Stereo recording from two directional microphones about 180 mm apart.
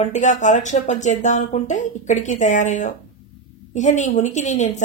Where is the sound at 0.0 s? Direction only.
40° left (ahead or behind).